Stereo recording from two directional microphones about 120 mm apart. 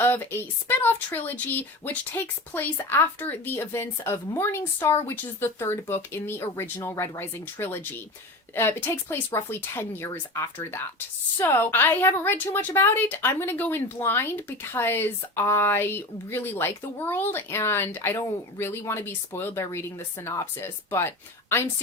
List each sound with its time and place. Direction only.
0.0 s a woman's voice: 15° left (ahead or behind)